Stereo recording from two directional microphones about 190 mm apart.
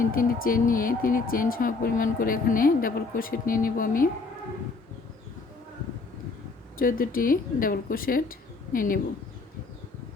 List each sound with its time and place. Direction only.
0.0 s speech: 45° left (ahead or behind)
6.7 s speech: 50° left (ahead or behind)